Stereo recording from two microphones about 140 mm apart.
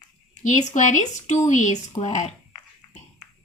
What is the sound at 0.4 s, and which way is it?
Speech, 60° left (ahead or behind).